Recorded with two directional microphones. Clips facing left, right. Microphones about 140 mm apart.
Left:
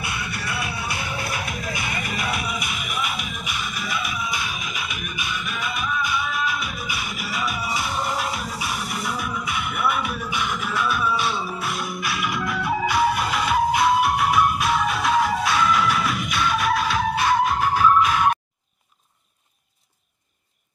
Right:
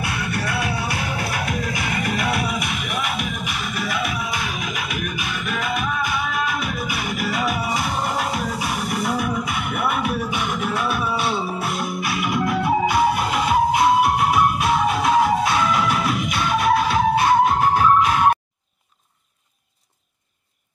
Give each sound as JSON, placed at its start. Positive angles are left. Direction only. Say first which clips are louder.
{"t": 0.0, "sound": "music", "louder": "right 5 dB", "side_deg": -55}
{"t": 12.0, "sound": "music", "louder": "right 5 dB", "side_deg": -25}